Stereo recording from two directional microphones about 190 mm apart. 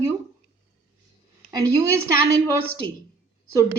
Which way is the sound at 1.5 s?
15° right (ahead or behind).